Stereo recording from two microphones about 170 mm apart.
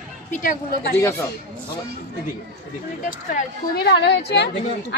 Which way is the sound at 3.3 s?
50° left (ahead or behind).